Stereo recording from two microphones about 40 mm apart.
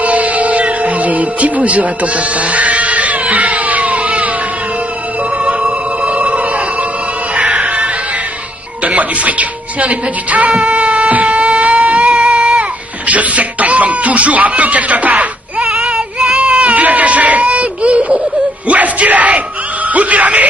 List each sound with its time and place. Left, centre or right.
0.0 s music: right
5.4 s music: right
8.8 s speech: right
11.8 s baby cry: right
15.7 s baby cry: right
18.7 s yell: right
19.9 s music: right